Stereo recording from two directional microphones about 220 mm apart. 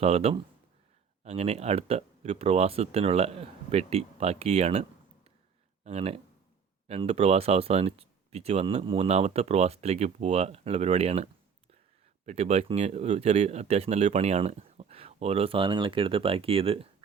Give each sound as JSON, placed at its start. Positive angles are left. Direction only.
{"t": 0.0, "sound": "speech", "side_deg": -25}